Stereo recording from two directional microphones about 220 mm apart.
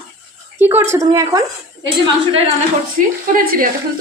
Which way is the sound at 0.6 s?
10° right (ahead or behind).